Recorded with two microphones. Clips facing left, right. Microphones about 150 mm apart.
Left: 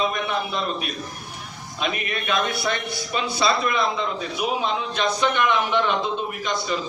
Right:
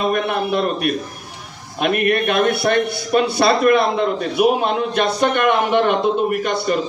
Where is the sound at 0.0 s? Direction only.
60° right (ahead or behind).